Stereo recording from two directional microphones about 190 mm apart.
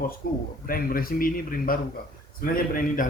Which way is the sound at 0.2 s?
50° left (ahead or behind).